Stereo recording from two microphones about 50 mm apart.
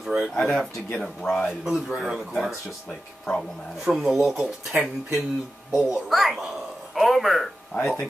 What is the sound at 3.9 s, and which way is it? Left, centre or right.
Speech, centre.